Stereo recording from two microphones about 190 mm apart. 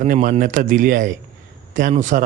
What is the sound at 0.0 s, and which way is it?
Speech, 40° right (ahead or behind).